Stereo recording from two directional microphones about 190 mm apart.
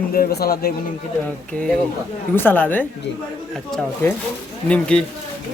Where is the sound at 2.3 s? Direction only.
10° left (ahead or behind).